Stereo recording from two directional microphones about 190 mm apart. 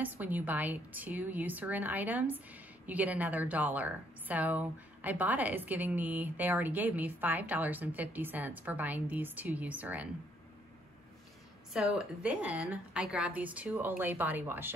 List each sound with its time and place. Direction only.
0.0 s a woman's voice: 10° right (ahead or behind)
11.7 s a woman's voice: 5° right (ahead or behind)